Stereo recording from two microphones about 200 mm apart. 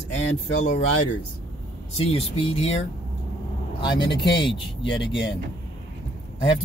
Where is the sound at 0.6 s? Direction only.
40° left (ahead or behind).